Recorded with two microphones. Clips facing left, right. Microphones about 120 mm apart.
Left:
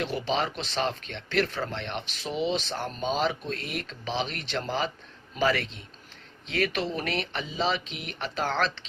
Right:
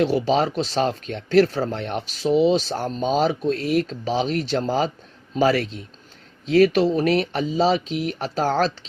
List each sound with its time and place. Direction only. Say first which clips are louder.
0.0 s speech: right 9 dB; 40° right (ahead or behind)